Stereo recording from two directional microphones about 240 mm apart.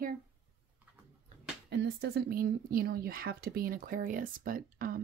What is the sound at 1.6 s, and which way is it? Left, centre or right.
Speech, right.